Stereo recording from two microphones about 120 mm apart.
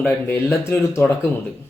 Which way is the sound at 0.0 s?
15° left (ahead or behind).